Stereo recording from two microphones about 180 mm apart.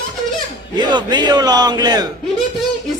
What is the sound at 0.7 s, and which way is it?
A man's voice, 25° right (ahead or behind).